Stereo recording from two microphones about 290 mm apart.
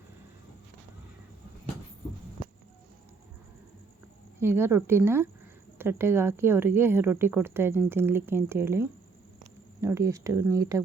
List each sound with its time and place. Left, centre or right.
4.4 s speech: centre